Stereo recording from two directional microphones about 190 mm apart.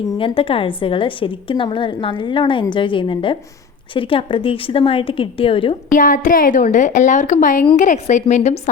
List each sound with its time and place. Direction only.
0.2 s a woman's voice: 30° left (ahead or behind)
5.9 s a woman's voice: 45° left (ahead or behind)